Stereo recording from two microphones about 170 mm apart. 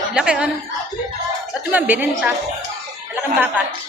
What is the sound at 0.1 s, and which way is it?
Speech, 5° right (ahead or behind).